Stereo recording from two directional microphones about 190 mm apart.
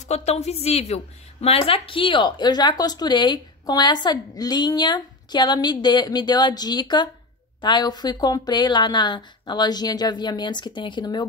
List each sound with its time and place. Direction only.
0.1 s a woman's voice: 35° left (ahead or behind)